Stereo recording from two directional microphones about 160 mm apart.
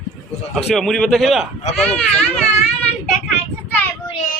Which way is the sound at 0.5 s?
Centre (ahead or behind).